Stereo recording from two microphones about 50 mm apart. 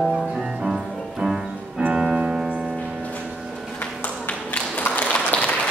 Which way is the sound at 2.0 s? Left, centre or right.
Centre.